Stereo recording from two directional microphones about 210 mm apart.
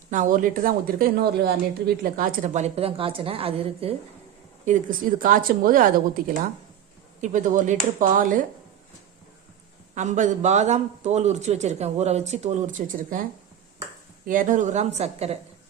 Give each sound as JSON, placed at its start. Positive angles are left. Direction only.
{"t": 0.1, "sound": "a man's voice", "side_deg": -40}
{"t": 4.6, "sound": "a man's voice", "side_deg": -40}
{"t": 9.9, "sound": "a man's voice", "side_deg": -35}
{"t": 14.3, "sound": "a man's voice", "side_deg": -40}